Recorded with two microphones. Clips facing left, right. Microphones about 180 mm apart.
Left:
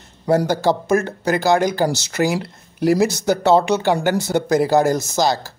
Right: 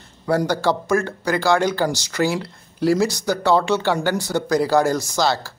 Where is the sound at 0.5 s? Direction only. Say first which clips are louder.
Left 2 dB; 20° left (ahead or behind).